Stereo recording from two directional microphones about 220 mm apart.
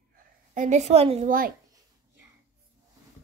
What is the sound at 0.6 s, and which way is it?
Speech, 30° right (ahead or behind).